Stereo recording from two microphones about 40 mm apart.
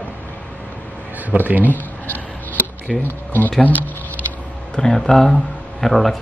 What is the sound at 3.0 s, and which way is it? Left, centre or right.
Speech, left.